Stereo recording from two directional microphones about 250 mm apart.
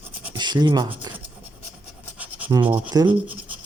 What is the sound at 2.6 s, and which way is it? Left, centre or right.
Speech, centre.